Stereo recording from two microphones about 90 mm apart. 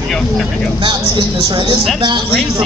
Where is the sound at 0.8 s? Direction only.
60° right (ahead or behind).